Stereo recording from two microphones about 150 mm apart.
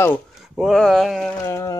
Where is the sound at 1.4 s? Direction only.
20° left (ahead or behind).